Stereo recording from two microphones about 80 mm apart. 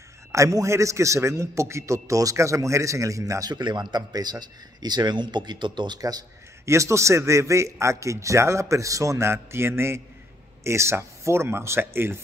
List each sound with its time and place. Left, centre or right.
0.3 s a man's voice: right
6.6 s a man's voice: right